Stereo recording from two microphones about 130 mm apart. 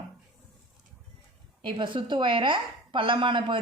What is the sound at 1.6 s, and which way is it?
A woman's voice, 40° right (ahead or behind).